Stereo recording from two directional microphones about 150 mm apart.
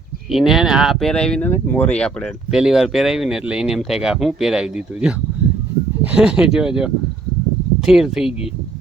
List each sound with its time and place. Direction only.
0.3 s speech: centre (ahead or behind)
2.5 s speech: 5° right (ahead or behind)